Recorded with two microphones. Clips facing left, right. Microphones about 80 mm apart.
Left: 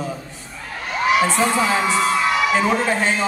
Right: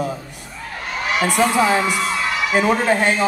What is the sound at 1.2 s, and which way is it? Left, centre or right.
A woman's voice, centre.